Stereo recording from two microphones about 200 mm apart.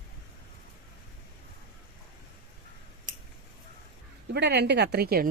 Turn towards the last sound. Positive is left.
turn(degrees=-50)  # may be behind; listen again after turning